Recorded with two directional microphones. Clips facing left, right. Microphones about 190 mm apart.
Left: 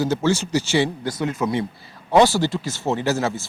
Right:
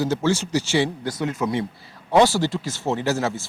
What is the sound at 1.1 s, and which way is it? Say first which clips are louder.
Speech: left 1 dB; 25° left (ahead or behind).